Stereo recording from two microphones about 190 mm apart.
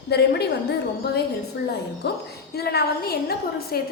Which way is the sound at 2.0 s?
60° left (ahead or behind).